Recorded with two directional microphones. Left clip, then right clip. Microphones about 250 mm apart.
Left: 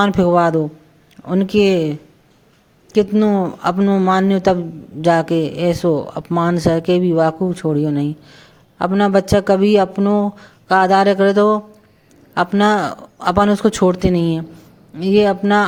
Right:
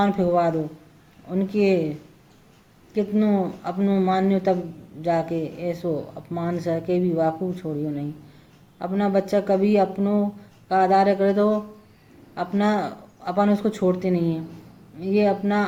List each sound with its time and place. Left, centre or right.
0.0 s speech: left
2.9 s speech: left